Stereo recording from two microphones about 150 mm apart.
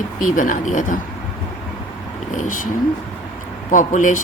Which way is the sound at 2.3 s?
60° left (ahead or behind).